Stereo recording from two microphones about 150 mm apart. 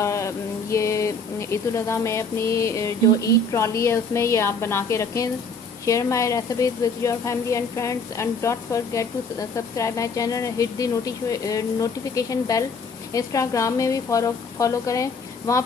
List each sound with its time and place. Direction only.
0.0 s speech: 20° left (ahead or behind)